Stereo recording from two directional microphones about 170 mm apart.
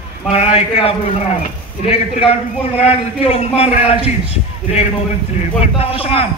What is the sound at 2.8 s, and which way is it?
A man's voice, 35° left (ahead or behind).